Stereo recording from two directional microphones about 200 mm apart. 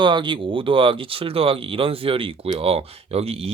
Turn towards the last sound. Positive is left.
turn(degrees=-30)  # may be behind; listen again after turning